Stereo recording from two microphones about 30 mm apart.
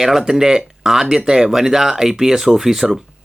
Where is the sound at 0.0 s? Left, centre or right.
Centre.